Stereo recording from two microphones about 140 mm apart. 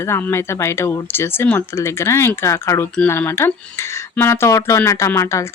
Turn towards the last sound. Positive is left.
turn(degrees=20)  # may be behind; listen again after turning